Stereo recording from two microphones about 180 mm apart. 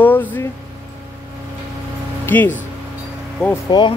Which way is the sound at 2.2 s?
10° left (ahead or behind).